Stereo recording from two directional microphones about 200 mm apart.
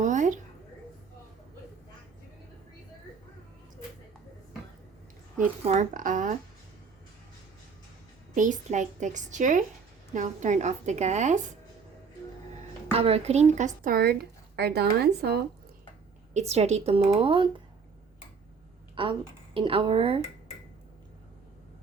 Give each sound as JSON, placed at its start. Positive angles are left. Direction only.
{"t": 0.0, "sound": "a sound", "side_deg": -40}
{"t": 5.6, "sound": "a woman's voice", "side_deg": -35}
{"t": 8.4, "sound": "a woman's voice", "side_deg": -40}
{"t": 12.9, "sound": "speech", "side_deg": -30}
{"t": 16.3, "sound": "a woman's voice", "side_deg": -35}
{"t": 19.0, "sound": "speech", "side_deg": -25}